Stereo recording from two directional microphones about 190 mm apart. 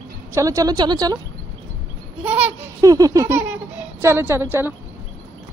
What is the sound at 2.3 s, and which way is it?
Speech, 10° right (ahead or behind).